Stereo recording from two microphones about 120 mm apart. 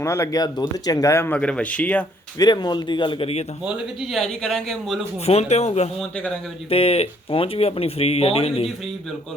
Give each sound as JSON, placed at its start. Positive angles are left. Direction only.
{"t": 0.0, "sound": "speech", "side_deg": 25}
{"t": 1.4, "sound": "speech", "side_deg": 10}
{"t": 2.4, "sound": "speech", "side_deg": 35}
{"t": 4.1, "sound": "speech", "side_deg": 0}
{"t": 5.2, "sound": "speech", "side_deg": 60}
{"t": 6.0, "sound": "speech", "side_deg": 10}
{"t": 6.7, "sound": "speech", "side_deg": 55}